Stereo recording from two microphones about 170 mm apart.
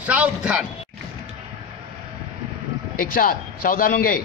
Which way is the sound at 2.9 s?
55° left (ahead or behind).